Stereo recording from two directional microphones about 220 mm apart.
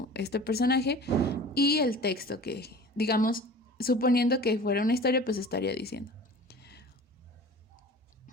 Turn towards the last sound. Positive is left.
turn(degrees=45)  # may be behind; listen again after turning